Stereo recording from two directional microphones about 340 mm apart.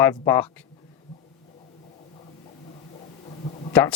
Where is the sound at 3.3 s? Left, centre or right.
Centre.